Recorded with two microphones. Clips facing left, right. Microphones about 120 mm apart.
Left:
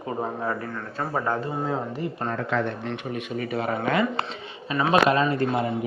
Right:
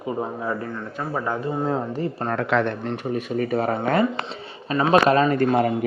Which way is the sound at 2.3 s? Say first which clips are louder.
Right 5 dB; 80° right.